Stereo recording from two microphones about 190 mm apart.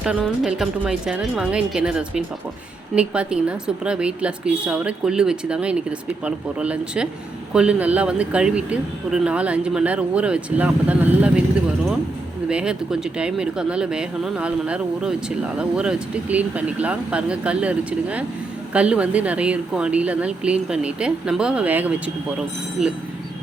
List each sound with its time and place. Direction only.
0.4 s a woman's voice: 5° right (ahead or behind)
12.5 s a woman's voice: 5° right (ahead or behind)